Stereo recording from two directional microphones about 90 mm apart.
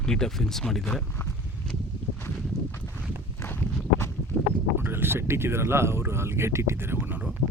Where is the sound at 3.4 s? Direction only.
20° left (ahead or behind).